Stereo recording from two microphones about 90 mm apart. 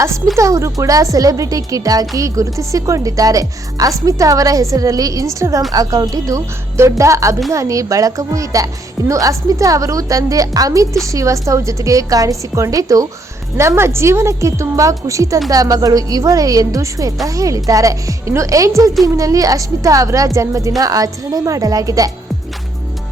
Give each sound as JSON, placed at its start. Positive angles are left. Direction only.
{"t": 0.3, "sound": "speech", "side_deg": -35}